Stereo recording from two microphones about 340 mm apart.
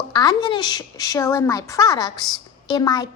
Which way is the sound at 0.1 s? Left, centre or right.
Centre.